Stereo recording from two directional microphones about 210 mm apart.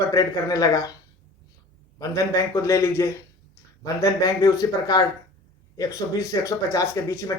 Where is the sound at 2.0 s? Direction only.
15° left (ahead or behind).